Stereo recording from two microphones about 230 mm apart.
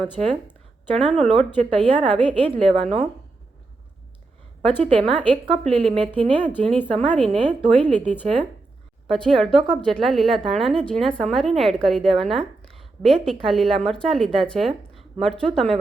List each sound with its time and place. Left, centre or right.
0.2 s speech: right
4.8 s speech: right
6.4 s speech: centre
6.9 s speech: right
9.0 s a woman's voice: centre
14.9 s a sound: centre
15.5 s a woman's voice: centre